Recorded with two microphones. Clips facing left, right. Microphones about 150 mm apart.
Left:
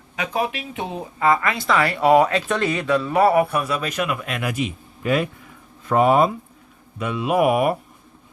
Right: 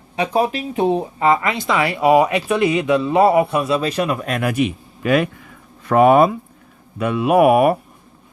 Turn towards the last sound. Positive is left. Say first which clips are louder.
# right 5 dB
turn(degrees=-60)  # may be behind; listen again after turning